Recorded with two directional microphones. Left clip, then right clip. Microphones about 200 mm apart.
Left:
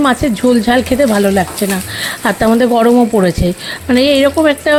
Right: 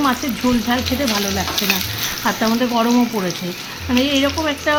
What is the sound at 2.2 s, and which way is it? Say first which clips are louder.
Speech: left 8 dB; 35° left (ahead or behind).